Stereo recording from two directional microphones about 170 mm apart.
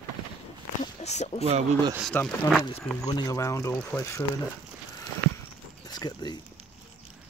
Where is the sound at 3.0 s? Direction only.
20° left (ahead or behind).